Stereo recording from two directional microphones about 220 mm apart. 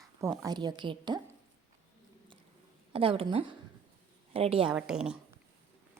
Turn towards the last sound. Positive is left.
turn(degrees=-5)  # may be behind; listen again after turning